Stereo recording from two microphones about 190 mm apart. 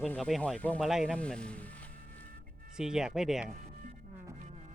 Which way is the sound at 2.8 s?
5° right (ahead or behind).